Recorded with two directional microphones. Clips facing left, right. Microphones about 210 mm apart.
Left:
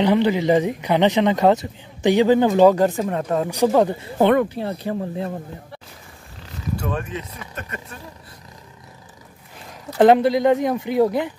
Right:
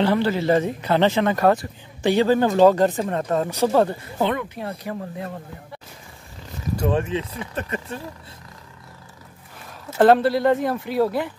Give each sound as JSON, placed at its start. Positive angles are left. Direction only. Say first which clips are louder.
{"t": 0.0, "sound": "speech", "louder": "left 3 dB", "side_deg": 15}
{"t": 4.2, "sound": "speech", "louder": "left 7 dB", "side_deg": 55}
{"t": 4.6, "sound": "speech", "louder": "left 5 dB", "side_deg": 30}
{"t": 6.8, "sound": "speech", "louder": "right 8 dB", "side_deg": -30}
{"t": 9.8, "sound": "speech", "louder": "left 2 dB", "side_deg": 15}